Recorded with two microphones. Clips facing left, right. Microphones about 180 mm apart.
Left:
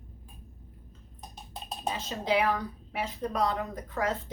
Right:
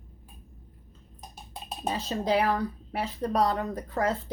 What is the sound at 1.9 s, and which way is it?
A woman's voice, 35° right (ahead or behind).